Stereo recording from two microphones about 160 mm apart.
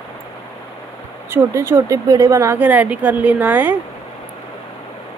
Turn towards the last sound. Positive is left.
turn(degrees=-10)  # may be behind; listen again after turning